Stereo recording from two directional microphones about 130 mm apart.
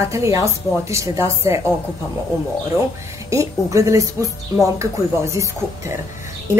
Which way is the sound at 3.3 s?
25° right (ahead or behind).